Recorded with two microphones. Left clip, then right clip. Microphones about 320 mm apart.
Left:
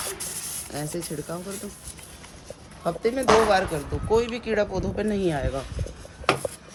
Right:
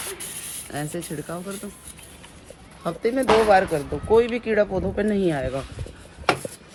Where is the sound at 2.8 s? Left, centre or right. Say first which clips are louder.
Right 1 dB; centre.